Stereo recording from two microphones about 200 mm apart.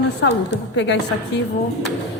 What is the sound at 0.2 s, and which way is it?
Speech, 60° left (ahead or behind).